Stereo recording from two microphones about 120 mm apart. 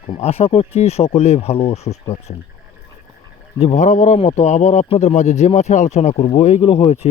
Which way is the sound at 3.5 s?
65° left (ahead or behind).